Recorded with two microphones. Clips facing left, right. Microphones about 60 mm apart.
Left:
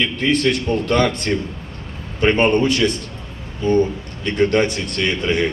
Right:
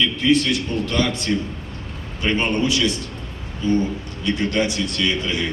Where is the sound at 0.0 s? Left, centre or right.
Left.